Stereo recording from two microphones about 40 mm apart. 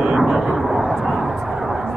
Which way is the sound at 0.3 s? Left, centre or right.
Right.